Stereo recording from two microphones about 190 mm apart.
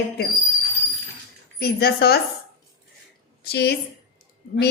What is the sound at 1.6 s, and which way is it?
Speech, 55° left (ahead or behind).